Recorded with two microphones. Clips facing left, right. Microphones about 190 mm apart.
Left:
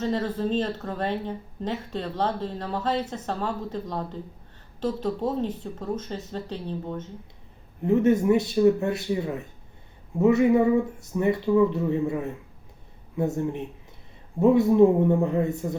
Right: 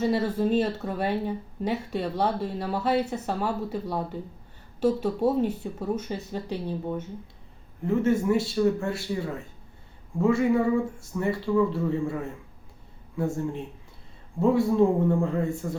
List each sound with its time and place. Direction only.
0.0 s speech: 10° right (ahead or behind)
7.9 s speech: 20° left (ahead or behind)